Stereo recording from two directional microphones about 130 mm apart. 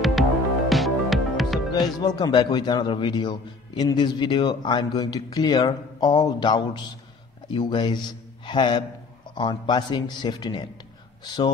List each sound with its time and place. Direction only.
0.7 s music: centre (ahead or behind)
1.8 s a man's voice: 30° left (ahead or behind)